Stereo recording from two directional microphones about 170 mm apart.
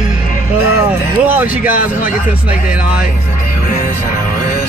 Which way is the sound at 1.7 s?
55° left (ahead or behind).